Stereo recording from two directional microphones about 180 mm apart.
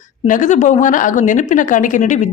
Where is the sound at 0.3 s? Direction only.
45° left (ahead or behind).